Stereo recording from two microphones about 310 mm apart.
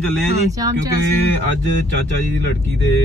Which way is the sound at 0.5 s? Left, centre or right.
Centre.